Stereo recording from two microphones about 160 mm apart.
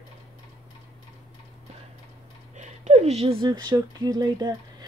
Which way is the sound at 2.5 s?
45° right (ahead or behind).